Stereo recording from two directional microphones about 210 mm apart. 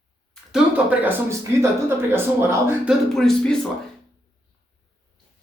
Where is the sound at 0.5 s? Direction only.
5° right (ahead or behind).